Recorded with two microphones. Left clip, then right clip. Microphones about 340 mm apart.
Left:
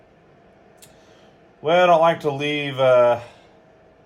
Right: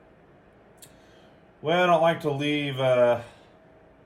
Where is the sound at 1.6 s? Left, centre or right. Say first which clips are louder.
Left 6 dB; centre.